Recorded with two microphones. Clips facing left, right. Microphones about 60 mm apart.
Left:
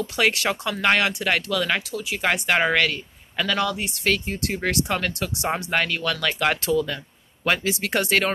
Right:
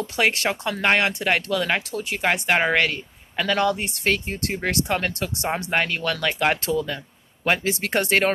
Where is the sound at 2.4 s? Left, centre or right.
Right.